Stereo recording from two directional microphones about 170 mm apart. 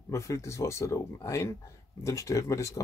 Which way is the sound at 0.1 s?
15° left (ahead or behind).